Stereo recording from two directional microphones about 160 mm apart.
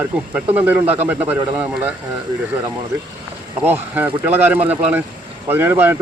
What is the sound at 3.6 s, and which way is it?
Speech, 10° right (ahead or behind).